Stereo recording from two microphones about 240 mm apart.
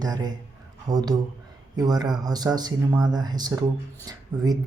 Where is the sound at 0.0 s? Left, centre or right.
Centre.